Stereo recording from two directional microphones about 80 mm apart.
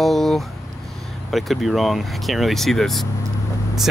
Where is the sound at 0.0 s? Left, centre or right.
Centre.